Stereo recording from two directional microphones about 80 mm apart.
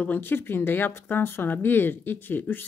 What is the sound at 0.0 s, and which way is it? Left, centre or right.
Speech, left.